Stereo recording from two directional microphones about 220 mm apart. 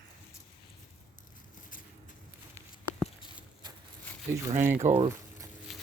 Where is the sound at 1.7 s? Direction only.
40° left (ahead or behind).